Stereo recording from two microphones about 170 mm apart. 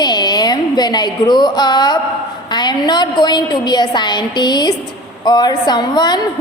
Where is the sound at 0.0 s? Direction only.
25° left (ahead or behind).